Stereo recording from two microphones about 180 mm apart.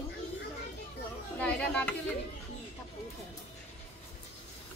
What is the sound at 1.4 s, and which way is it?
Chatter, 5° left (ahead or behind).